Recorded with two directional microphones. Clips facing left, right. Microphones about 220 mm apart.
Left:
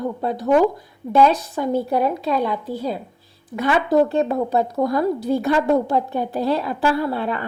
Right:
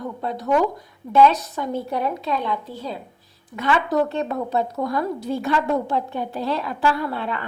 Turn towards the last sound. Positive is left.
turn(degrees=40)  # may be behind; listen again after turning